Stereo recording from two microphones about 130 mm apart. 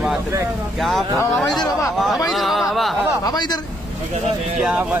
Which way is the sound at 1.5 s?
30° left (ahead or behind).